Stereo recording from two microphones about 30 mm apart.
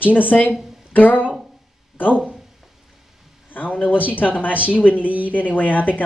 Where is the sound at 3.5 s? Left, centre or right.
Left.